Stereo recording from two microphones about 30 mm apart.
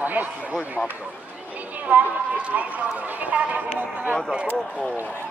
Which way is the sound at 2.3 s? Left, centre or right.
Right.